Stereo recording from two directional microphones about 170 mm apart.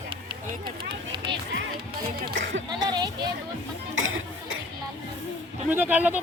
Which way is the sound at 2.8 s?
25° right (ahead or behind).